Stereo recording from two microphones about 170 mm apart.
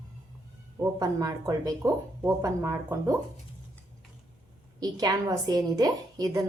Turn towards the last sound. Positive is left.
turn(degrees=-20)  # may be behind; listen again after turning